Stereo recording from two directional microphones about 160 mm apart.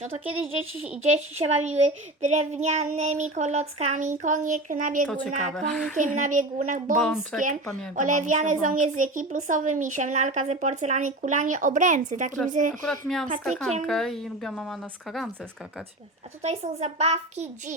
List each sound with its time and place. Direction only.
1.1 s a child's voice: 45° right (ahead or behind)
5.0 s speech: 10° left (ahead or behind)
6.0 s a child's voice: 50° right (ahead or behind)
7.0 s speech: centre (ahead or behind)
7.9 s a child's voice: 50° right (ahead or behind)
12.8 s speech: centre (ahead or behind)
16.4 s a child's voice: 45° right (ahead or behind)